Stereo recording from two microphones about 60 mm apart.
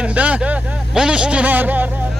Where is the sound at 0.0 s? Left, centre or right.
Right.